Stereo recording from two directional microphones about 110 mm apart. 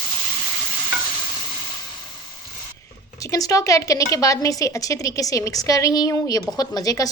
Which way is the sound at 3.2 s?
30° left (ahead or behind).